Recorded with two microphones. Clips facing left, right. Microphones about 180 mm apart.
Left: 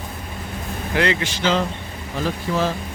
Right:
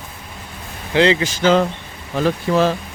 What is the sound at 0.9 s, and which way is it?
Speech, 25° right (ahead or behind).